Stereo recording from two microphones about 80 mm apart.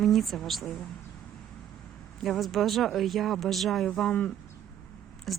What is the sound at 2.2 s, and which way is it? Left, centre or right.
Speech, centre.